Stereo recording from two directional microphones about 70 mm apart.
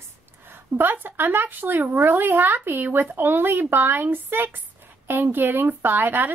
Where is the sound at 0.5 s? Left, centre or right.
Right.